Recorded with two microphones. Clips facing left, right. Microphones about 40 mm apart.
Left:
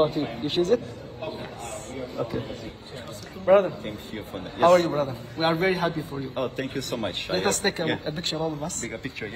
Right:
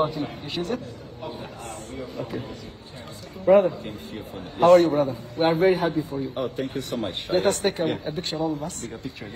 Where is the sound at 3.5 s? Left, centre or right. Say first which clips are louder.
Right 2 dB; left.